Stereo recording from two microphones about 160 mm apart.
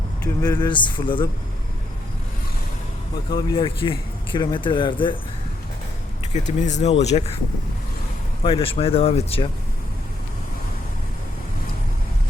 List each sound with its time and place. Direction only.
0.4 s speech: 25° left (ahead or behind)
3.2 s speech: 30° left (ahead or behind)
6.3 s speech: 50° left (ahead or behind)
8.4 s speech: 35° left (ahead or behind)